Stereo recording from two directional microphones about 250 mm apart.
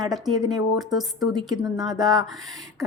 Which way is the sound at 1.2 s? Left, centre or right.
Centre.